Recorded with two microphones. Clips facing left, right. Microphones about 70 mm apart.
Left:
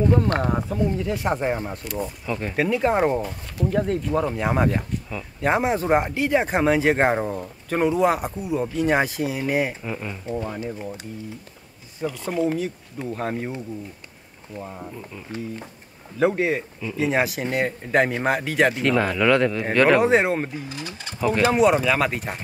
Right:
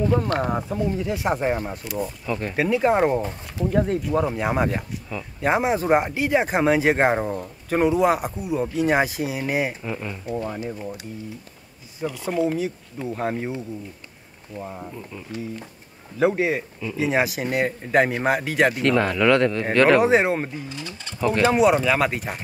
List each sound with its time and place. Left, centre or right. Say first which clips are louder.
0.4 s speech: left 1 dB; centre
3.2 s speech: right 1 dB; right
3.6 s speech: right 1 dB; centre
12.0 s speech: right 1 dB; centre
14.6 s speech: right 1 dB; centre
20.7 s speech: left 1 dB; centre
21.2 s speech: even; centre